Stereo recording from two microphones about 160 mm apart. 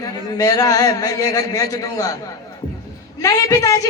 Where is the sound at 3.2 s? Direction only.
20° left (ahead or behind).